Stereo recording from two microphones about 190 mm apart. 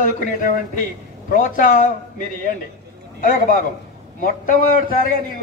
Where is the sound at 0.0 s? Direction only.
40° left (ahead or behind).